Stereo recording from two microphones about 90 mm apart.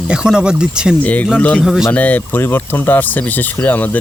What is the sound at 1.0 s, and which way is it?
Speech, 15° left (ahead or behind).